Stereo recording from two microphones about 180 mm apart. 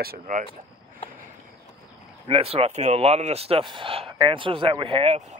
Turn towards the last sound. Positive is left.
turn(degrees=-40)  # may be behind; listen again after turning